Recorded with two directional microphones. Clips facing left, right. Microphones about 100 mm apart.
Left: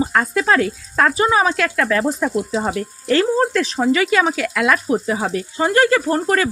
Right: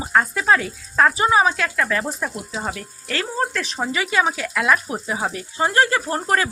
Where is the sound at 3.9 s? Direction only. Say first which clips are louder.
Left 4 dB; 20° right (ahead or behind).